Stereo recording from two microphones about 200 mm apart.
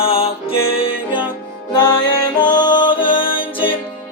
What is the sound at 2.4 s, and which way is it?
Music, 20° left (ahead or behind).